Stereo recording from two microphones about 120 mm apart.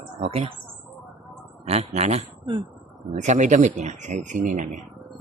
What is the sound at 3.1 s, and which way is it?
Speech, 80° right.